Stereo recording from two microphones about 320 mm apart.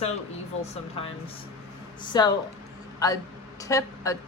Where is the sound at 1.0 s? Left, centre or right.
Centre.